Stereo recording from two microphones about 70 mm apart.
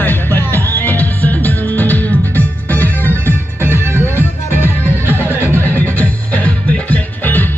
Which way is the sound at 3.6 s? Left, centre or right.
Right.